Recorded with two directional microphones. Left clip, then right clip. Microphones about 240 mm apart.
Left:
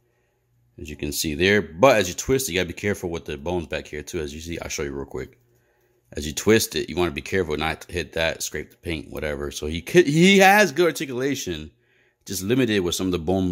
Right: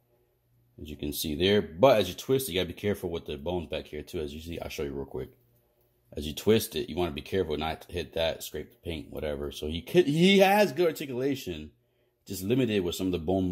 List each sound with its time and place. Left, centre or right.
0.8 s speech: left